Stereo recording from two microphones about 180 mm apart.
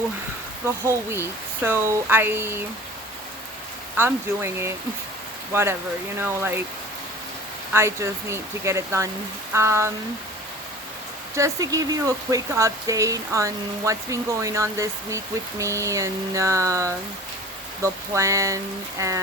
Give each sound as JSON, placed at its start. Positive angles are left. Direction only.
{"t": 0.6, "sound": "speech", "side_deg": -15}
{"t": 3.9, "sound": "speech", "side_deg": -15}
{"t": 7.7, "sound": "speech", "side_deg": -15}
{"t": 11.3, "sound": "speech", "side_deg": -20}